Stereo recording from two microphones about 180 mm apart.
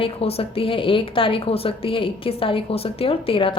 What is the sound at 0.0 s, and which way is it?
A woman's voice, 35° left (ahead or behind).